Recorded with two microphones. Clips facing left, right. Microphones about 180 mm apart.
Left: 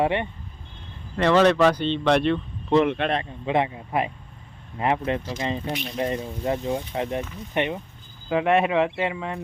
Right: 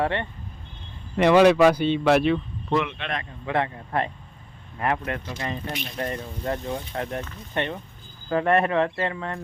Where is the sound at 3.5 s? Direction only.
15° left (ahead or behind).